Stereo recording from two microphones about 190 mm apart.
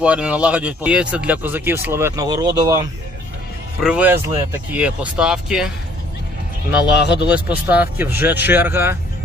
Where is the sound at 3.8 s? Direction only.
10° right (ahead or behind).